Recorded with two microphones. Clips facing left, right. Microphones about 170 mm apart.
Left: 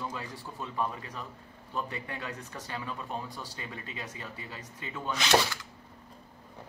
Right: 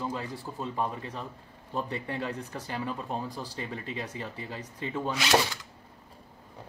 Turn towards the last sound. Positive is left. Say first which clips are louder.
# right 1 dB
turn(degrees=-5)  # may be behind; listen again after turning